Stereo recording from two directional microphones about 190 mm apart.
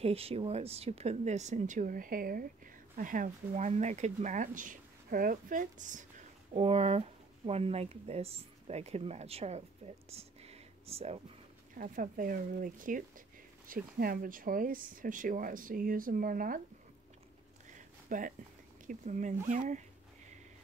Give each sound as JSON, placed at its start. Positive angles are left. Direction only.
{"t": 0.0, "sound": "speech", "side_deg": -30}
{"t": 10.0, "sound": "whispering", "side_deg": -35}
{"t": 11.7, "sound": "speech", "side_deg": -45}
{"t": 17.6, "sound": "a sound", "side_deg": -40}
{"t": 18.9, "sound": "speech", "side_deg": -40}